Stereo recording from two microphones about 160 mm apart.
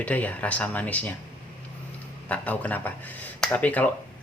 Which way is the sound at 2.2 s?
10° left (ahead or behind).